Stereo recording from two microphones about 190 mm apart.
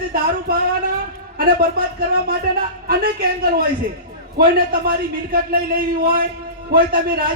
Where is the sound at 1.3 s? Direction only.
50° right (ahead or behind).